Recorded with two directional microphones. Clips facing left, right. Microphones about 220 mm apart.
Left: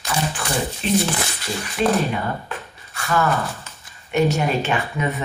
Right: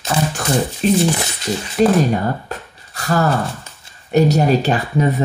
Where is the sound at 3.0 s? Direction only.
35° right (ahead or behind).